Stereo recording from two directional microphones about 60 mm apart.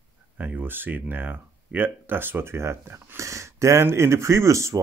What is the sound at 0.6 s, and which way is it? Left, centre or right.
Speech, right.